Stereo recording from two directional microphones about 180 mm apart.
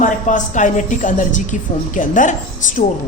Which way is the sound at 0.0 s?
45° left (ahead or behind).